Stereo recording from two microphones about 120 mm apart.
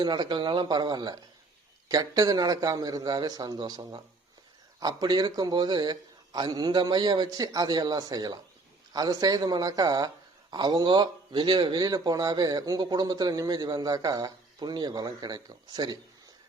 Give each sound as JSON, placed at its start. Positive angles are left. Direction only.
{"t": 0.0, "sound": "speech", "side_deg": -35}